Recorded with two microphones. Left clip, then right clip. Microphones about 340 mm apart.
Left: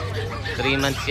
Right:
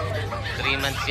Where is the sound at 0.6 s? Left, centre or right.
Centre.